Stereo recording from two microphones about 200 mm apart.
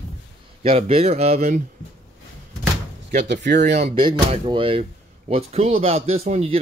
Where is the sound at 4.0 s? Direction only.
25° right (ahead or behind).